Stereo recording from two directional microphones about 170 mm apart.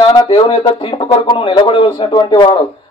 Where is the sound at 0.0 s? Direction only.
30° left (ahead or behind).